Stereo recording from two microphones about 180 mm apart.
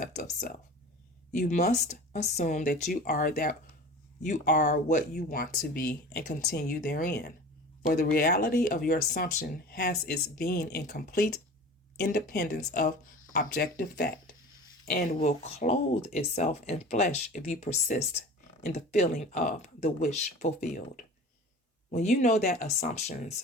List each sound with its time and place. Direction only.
0.0 s a sound: 45° left (ahead or behind)
1.4 s speech: 40° left (ahead or behind); by 7.3 s 65° left (ahead or behind)
7.8 s speech: 45° left (ahead or behind); by 12.8 s 65° left (ahead or behind)
13.3 s speech: 50° left (ahead or behind)
14.8 s speech: 50° left (ahead or behind)
15.2 s speech: 40° left (ahead or behind)